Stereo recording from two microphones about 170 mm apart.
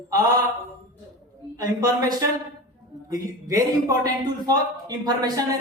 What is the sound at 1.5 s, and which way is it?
A man's voice, 20° right (ahead or behind).